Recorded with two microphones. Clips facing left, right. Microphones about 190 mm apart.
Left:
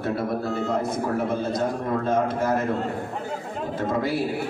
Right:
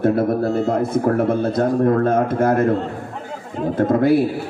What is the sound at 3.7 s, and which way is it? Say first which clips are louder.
Speech: right 10 dB; 55° right (ahead or behind).